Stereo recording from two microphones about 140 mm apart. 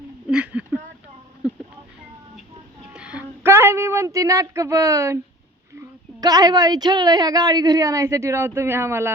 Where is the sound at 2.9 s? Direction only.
10° right (ahead or behind).